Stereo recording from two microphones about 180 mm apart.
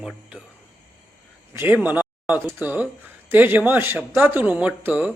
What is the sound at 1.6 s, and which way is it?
Speech, 10° right (ahead or behind).